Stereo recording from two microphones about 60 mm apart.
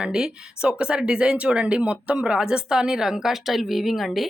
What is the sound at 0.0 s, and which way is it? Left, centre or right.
A woman's voice, centre.